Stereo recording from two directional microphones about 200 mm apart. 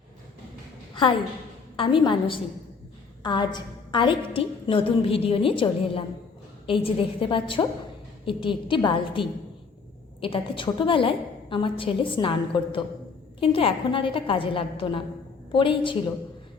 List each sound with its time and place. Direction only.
1.7 s a woman's voice: 25° left (ahead or behind)